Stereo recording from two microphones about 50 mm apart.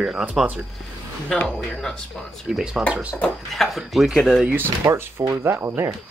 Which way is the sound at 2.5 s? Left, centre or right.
Centre.